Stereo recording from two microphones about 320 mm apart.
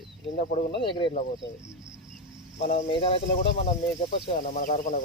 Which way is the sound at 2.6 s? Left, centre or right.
Centre.